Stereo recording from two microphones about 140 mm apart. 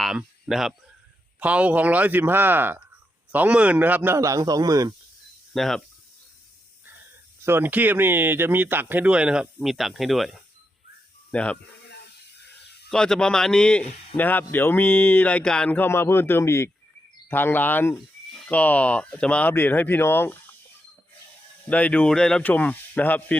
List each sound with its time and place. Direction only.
0.0 s a sound: 5° right (ahead or behind)
1.4 s speech: 10° right (ahead or behind); by 4.9 s 25° right (ahead or behind)
5.5 s a man's voice: centre (ahead or behind)
7.4 s speech: 15° right (ahead or behind); by 11.6 s 10° left (ahead or behind)
12.9 s a man's voice: 5° left (ahead or behind)
21.7 s speech: 10° left (ahead or behind)